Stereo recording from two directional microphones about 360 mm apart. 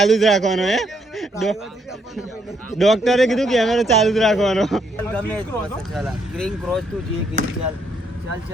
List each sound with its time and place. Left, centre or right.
0.0 s a man's voice: centre
2.7 s speech: centre
7.4 s speech: right